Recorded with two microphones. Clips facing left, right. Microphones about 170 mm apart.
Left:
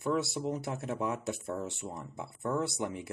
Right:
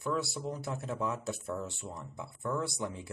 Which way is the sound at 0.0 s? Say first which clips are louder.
Left 3 dB; 20° left (ahead or behind).